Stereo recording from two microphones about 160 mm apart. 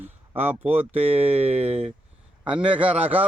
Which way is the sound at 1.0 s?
40° right (ahead or behind).